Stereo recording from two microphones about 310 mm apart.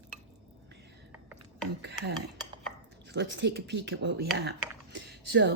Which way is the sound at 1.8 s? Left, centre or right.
Right.